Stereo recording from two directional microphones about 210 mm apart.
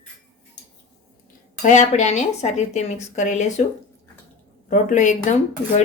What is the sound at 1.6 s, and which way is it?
Speech, 35° left (ahead or behind).